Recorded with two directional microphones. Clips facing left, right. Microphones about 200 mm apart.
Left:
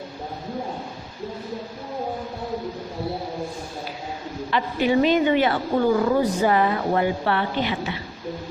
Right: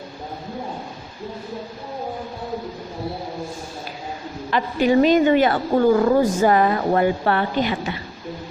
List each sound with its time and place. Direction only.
4.5 s a woman's voice: 45° right (ahead or behind)